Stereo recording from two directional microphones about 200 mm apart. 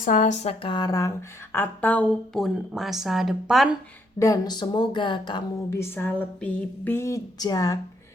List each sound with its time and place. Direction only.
0.0 s speech: 40° left (ahead or behind); by 3.8 s 5° right (ahead or behind)
4.2 s speech: 20° left (ahead or behind)
5.8 s speech: 10° left (ahead or behind)